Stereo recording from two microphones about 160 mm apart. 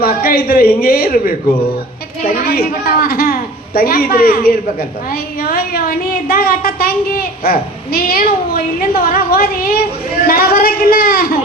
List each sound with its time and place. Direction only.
0.0 s a woman's voice: 70° left (ahead or behind)